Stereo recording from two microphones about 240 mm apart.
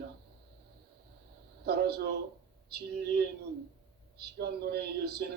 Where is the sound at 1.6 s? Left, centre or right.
Right.